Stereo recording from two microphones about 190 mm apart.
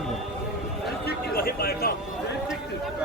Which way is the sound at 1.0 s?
55° left (ahead or behind).